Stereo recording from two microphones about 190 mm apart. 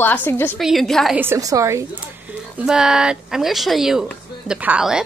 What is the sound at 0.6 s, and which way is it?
Speech, centre (ahead or behind).